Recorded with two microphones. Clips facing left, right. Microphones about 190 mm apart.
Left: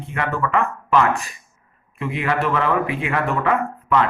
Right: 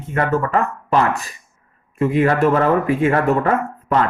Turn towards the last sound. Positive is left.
turn(degrees=-40)  # may be behind; listen again after turning